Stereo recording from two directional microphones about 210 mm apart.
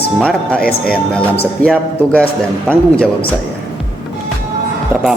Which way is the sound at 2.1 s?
5° left (ahead or behind).